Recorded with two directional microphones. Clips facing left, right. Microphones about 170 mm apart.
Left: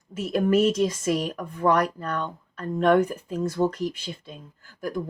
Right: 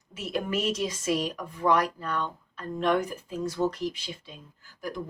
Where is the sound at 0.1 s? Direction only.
50° left (ahead or behind).